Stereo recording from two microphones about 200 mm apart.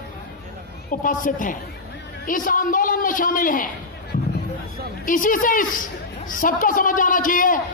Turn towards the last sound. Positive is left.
turn(degrees=40)  # may be behind; listen again after turning